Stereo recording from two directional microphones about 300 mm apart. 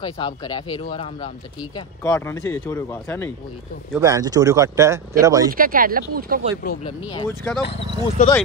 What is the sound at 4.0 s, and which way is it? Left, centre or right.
A man's voice, centre.